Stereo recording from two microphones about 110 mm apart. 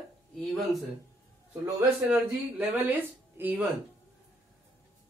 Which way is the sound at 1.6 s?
15° right (ahead or behind).